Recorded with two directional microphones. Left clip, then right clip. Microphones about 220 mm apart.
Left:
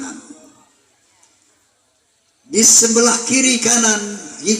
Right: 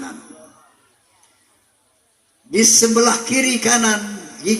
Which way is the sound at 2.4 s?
30° left (ahead or behind).